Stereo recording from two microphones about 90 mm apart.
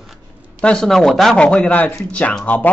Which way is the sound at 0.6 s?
5° left (ahead or behind).